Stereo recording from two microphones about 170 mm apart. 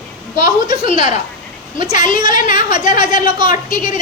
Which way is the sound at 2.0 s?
50° left (ahead or behind).